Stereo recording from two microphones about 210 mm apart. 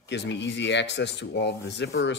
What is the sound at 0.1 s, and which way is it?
Speech, 55° left (ahead or behind).